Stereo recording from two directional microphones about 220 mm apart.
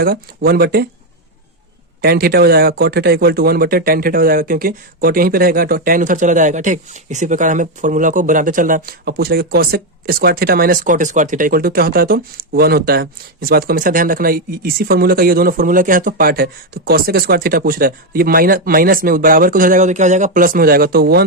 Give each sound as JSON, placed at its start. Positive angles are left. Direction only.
{"t": 0.0, "sound": "speech", "side_deg": -45}
{"t": 2.0, "sound": "speech", "side_deg": -45}